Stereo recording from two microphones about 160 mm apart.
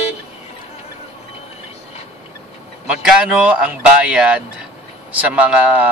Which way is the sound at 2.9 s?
5° right (ahead or behind).